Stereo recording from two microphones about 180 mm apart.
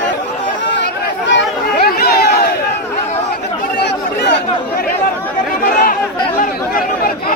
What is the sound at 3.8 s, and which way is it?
Chatter, 70° left (ahead or behind).